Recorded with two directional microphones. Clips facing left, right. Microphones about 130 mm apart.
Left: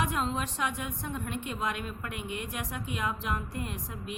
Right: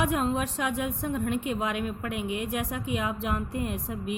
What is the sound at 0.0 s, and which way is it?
A woman's voice, 55° right (ahead or behind).